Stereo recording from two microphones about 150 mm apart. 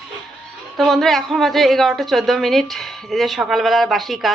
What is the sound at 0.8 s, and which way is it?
A woman's voice, centre (ahead or behind).